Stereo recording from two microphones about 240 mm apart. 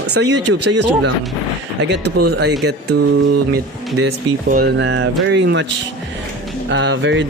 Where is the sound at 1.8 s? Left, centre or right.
Right.